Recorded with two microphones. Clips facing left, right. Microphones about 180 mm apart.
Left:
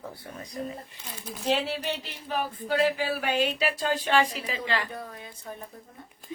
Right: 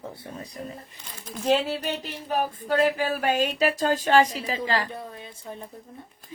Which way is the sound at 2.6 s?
40° right (ahead or behind).